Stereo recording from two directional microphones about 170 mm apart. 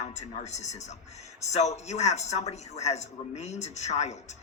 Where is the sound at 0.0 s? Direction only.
45° left (ahead or behind).